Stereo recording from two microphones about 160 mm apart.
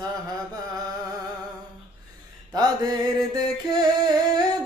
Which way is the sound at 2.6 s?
25° right (ahead or behind).